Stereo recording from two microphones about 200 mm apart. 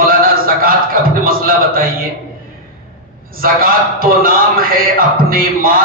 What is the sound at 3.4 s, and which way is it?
A man's voice, 45° right (ahead or behind).